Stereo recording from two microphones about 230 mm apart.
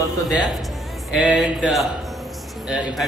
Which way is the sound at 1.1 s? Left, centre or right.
Centre.